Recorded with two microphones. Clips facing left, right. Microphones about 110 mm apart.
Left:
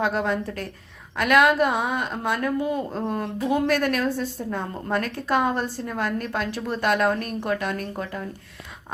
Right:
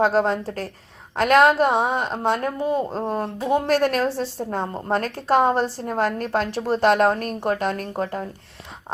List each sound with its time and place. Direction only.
0.0 s a woman's voice: 35° right (ahead or behind)